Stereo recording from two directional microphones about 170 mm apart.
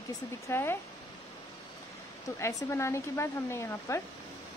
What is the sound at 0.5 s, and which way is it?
Speech, 15° left (ahead or behind).